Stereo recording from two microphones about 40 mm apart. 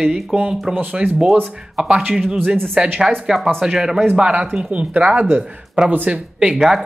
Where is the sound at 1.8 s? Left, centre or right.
Centre.